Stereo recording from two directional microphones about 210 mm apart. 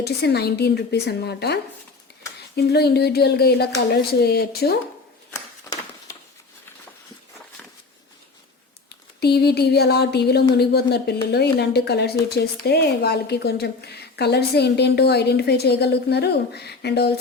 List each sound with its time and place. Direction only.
0.0 s a woman's voice: 50° left (ahead or behind)
2.6 s a woman's voice: 50° left (ahead or behind)
5.3 s a sound: 15° left (ahead or behind)
9.2 s a woman's voice: 50° left (ahead or behind)